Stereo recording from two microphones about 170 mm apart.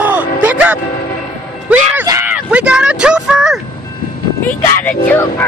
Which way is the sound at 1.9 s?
15° right (ahead or behind).